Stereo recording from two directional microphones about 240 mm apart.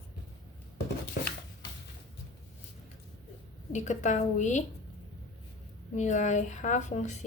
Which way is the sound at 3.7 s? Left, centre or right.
Left.